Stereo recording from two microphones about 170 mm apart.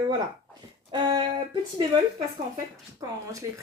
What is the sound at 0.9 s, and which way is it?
Speech, 30° right (ahead or behind).